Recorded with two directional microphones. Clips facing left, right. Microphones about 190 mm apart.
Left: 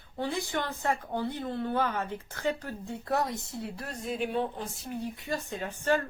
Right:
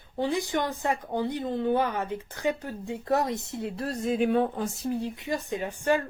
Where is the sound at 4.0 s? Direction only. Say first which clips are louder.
Right 6 dB; 50° right (ahead or behind).